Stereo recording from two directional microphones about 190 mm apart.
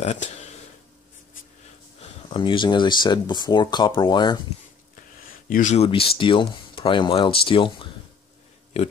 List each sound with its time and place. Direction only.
0.0 s speech: 35° left (ahead or behind)
2.2 s speech: 25° left (ahead or behind)
5.3 s speech: 45° left (ahead or behind); by 7.9 s 25° left (ahead or behind)